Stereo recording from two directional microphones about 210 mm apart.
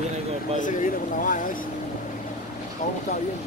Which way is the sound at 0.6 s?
40° left (ahead or behind).